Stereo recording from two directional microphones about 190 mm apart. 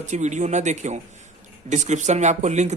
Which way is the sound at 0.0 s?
40° right (ahead or behind).